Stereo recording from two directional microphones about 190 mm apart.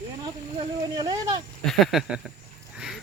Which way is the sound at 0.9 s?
20° right (ahead or behind).